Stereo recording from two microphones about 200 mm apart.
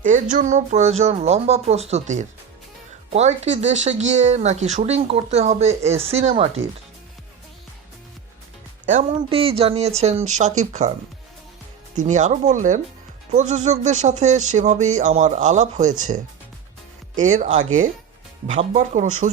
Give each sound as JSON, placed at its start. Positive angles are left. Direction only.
{"t": 0.0, "sound": "speech", "side_deg": -40}
{"t": 8.9, "sound": "speech", "side_deg": -30}
{"t": 11.9, "sound": "speech", "side_deg": -35}